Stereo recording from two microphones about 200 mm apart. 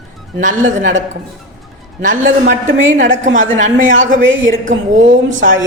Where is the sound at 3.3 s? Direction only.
40° right (ahead or behind).